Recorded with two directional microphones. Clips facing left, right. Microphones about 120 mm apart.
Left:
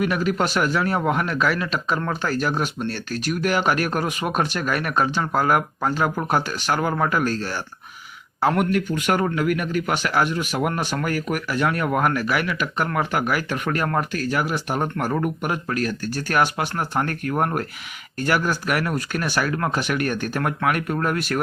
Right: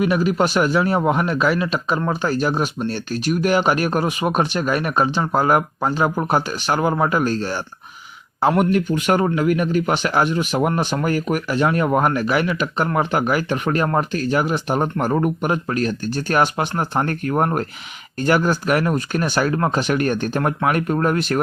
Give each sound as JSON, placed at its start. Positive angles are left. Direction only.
{"t": 0.0, "sound": "speech", "side_deg": -20}